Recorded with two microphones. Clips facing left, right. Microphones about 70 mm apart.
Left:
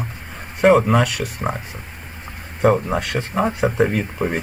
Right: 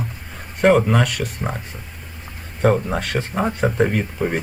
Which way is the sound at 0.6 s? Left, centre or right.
Centre.